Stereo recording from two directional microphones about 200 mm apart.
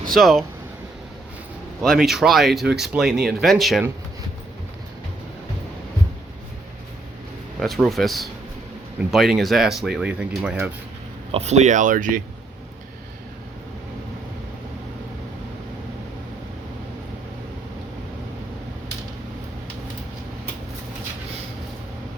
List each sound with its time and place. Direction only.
0.1 s speech: centre (ahead or behind)
1.8 s speech: centre (ahead or behind)
7.6 s speech: centre (ahead or behind)
11.3 s speech: 30° right (ahead or behind)